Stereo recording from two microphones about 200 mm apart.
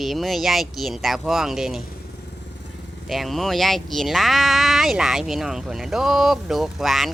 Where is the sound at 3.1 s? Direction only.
Centre (ahead or behind).